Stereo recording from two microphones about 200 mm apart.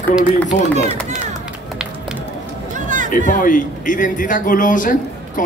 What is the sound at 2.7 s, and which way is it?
Run, 40° right (ahead or behind).